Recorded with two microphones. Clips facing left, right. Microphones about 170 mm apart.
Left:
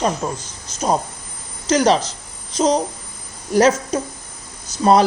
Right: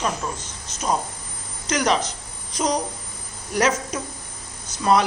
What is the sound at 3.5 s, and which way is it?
Speech, 30° left (ahead or behind).